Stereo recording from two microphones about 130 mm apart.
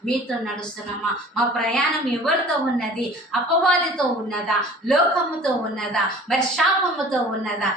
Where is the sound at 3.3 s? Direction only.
5° left (ahead or behind).